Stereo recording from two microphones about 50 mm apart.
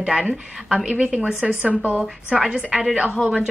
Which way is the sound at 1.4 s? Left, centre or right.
Right.